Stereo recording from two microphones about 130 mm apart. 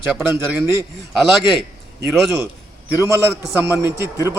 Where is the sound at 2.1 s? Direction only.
Centre (ahead or behind).